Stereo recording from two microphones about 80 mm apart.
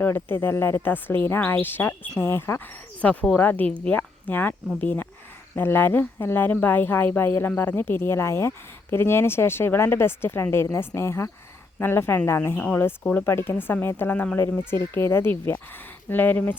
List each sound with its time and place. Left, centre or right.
0.0 s speech: left
3.0 s speech: centre; by 12.5 s left
13.1 s speech: left